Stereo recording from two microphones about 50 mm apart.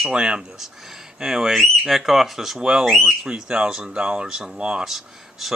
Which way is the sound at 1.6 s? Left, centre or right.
Centre.